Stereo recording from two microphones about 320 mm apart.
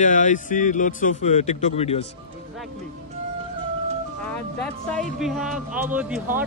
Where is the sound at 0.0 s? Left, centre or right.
Left.